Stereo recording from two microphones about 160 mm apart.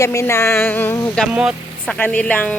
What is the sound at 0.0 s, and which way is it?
Speech, 20° left (ahead or behind).